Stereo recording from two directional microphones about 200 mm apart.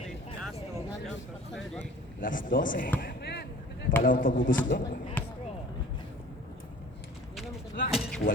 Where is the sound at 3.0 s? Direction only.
55° left (ahead or behind).